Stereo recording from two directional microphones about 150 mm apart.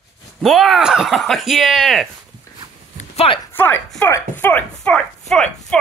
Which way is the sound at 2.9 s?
45° left (ahead or behind).